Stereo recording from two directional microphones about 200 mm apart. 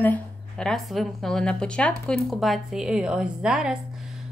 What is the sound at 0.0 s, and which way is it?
A woman's voice, 5° left (ahead or behind).